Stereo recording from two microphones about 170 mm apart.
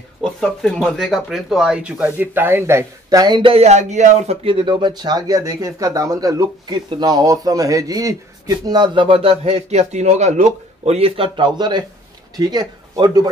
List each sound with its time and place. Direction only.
0.2 s speech: 5° left (ahead or behind); by 13.3 s 25° right (ahead or behind)